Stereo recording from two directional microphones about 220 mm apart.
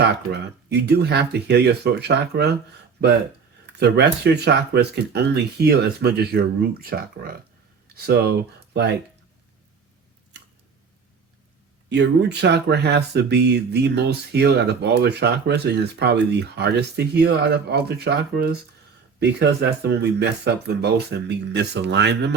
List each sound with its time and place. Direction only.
0.7 s speech: 50° right (ahead or behind)
11.9 s speech: 50° right (ahead or behind)